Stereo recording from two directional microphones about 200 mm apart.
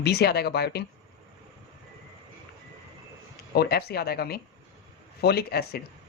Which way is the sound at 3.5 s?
50° left (ahead or behind).